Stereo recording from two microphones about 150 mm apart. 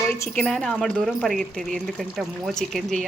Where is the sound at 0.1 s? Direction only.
15° left (ahead or behind).